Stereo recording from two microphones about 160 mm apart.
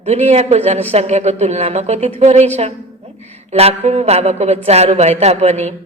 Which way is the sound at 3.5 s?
40° right (ahead or behind).